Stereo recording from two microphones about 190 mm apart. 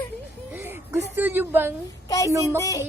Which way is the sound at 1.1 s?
10° right (ahead or behind).